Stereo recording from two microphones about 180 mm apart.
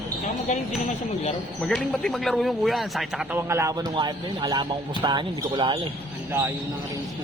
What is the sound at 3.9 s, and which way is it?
Speech, 25° right (ahead or behind).